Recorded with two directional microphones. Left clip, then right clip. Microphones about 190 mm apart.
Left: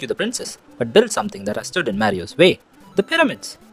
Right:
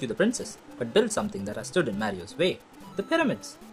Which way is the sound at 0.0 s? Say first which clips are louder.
Left 3 dB; 45° left (ahead or behind).